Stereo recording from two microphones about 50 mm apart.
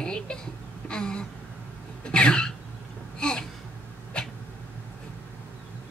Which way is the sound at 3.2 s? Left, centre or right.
Centre.